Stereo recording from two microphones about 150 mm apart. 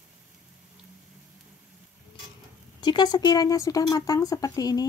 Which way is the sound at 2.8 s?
30° left (ahead or behind).